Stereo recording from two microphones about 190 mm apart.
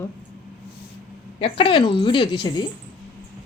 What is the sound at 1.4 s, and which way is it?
Speech, 30° left (ahead or behind).